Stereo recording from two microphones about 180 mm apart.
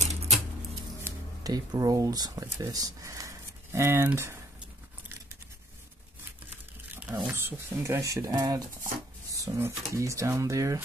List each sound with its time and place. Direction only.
1.0 s speech: 20° right (ahead or behind)
7.0 s speech: 10° right (ahead or behind)